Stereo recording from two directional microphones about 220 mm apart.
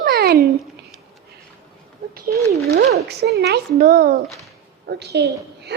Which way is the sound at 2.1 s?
40° right (ahead or behind).